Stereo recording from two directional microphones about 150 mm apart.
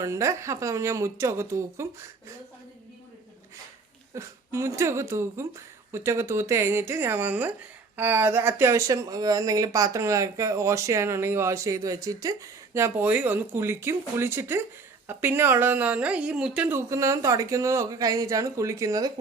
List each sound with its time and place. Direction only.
0.0 s speech: 20° right (ahead or behind)
4.1 s speech: 20° right (ahead or behind)